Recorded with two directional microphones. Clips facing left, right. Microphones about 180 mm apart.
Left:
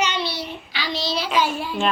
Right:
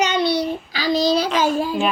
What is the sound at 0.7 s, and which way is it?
Child singing, 40° right (ahead or behind).